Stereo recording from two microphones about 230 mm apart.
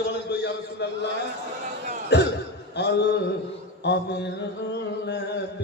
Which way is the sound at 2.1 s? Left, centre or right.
Left.